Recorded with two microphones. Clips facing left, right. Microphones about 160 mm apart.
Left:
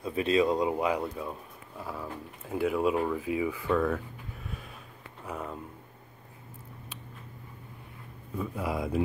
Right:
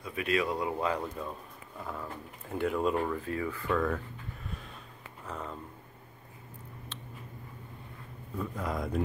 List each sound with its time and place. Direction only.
0.0 s speech: 25° left (ahead or behind); by 4.0 s 5° left (ahead or behind)
5.2 s speech: 10° left (ahead or behind)
8.4 s speech: 5° left (ahead or behind)